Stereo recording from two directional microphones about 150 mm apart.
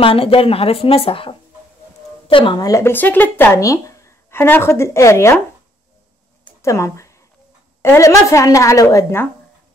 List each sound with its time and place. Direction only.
0.0 s speech: 35° left (ahead or behind); by 5.4 s 20° left (ahead or behind)
6.4 s a sound: 20° left (ahead or behind)
7.8 s a woman's voice: 15° left (ahead or behind)